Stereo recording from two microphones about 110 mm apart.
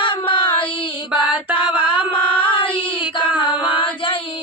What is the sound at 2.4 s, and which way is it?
Child singing, 50° left (ahead or behind).